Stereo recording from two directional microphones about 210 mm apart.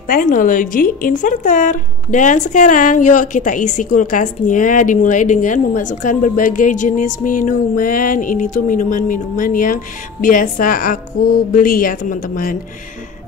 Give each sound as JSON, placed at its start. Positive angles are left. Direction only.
{"t": 0.1, "sound": "speech", "side_deg": 40}